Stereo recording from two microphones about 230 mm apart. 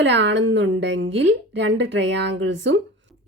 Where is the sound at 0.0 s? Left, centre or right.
Right.